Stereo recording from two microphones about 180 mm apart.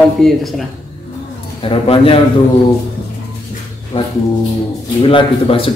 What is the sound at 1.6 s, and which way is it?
Speech, 30° left (ahead or behind).